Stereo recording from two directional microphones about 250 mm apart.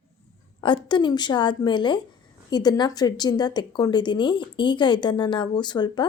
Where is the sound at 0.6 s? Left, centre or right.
Centre.